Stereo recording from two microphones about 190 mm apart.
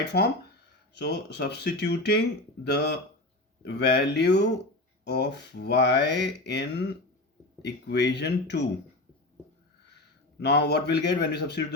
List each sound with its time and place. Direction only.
0.0 s mantra: 60° left (ahead or behind)
10.4 s mantra: 60° left (ahead or behind)